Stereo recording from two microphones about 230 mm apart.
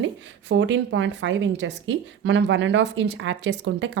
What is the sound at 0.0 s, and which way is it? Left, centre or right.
A woman's voice, right.